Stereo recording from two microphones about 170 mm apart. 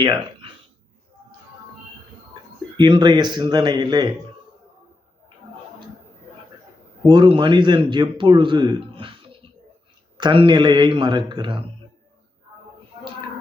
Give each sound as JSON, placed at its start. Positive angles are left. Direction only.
{"t": 0.0, "sound": "speech", "side_deg": -25}
{"t": 2.7, "sound": "speech", "side_deg": -25}
{"t": 7.1, "sound": "a man's voice", "side_deg": -30}